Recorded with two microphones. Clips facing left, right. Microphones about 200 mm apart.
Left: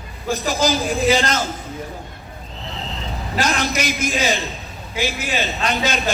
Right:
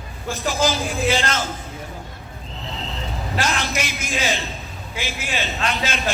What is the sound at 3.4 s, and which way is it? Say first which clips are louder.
A man's voice: left 4 dB; 40° left (ahead or behind).